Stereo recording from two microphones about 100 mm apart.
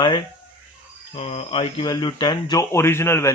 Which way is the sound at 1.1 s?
90° left.